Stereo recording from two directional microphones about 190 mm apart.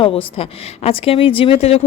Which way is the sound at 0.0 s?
30° left (ahead or behind).